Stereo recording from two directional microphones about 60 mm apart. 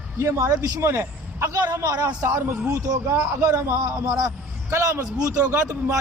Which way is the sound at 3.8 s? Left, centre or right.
Right.